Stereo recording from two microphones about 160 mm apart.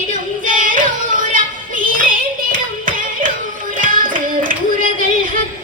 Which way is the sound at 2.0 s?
60° right (ahead or behind).